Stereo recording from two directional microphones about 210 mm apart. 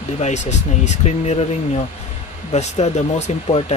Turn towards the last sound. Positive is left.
turn(degrees=30)  # may be behind; listen again after turning